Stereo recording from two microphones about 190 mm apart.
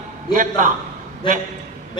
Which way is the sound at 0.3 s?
45° right (ahead or behind).